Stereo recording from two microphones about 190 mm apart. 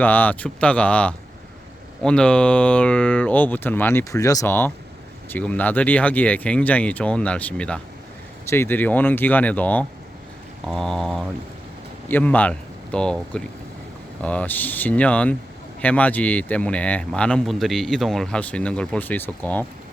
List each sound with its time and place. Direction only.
0.0 s a man's voice: 10° left (ahead or behind)